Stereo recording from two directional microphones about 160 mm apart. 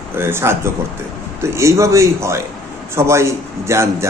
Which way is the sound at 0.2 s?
15° right (ahead or behind).